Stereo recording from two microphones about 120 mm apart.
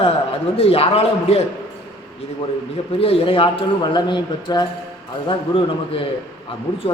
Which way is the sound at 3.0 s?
50° left (ahead or behind).